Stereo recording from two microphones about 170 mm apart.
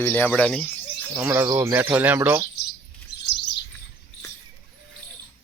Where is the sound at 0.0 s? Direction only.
10° left (ahead or behind).